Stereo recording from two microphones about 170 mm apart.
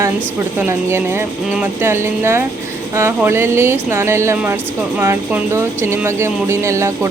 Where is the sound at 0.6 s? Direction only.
15° right (ahead or behind).